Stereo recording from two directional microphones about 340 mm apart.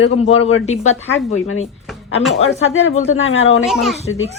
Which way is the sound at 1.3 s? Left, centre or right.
Left.